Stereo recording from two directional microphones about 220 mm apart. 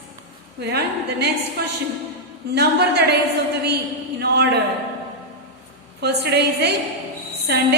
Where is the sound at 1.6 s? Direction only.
45° right (ahead or behind).